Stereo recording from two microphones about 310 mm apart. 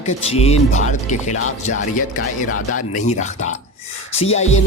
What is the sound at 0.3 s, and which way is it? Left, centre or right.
Speech, centre.